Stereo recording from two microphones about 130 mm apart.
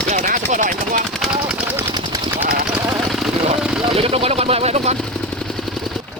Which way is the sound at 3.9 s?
50° right (ahead or behind).